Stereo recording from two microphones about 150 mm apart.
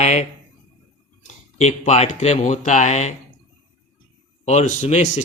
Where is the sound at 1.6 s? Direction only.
45° left (ahead or behind).